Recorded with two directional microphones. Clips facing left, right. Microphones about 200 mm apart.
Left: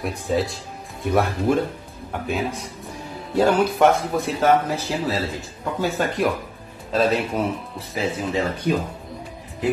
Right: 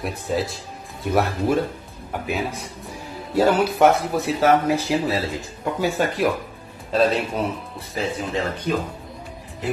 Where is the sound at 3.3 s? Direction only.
Centre (ahead or behind).